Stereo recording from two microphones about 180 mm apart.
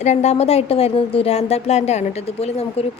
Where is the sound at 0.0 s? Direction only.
40° left (ahead or behind).